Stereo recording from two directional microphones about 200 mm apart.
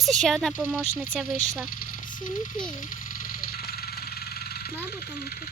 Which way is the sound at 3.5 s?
50° left (ahead or behind).